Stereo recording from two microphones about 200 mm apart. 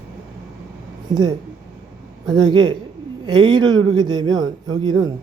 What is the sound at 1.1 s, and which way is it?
Speech, 20° right (ahead or behind).